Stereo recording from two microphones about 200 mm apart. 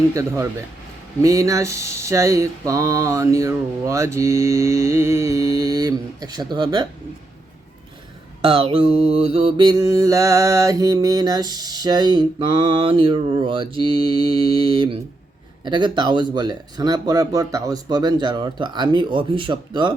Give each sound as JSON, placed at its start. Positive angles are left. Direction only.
{"t": 0.1, "sound": "mantra", "side_deg": -15}
{"t": 8.4, "sound": "mantra", "side_deg": -30}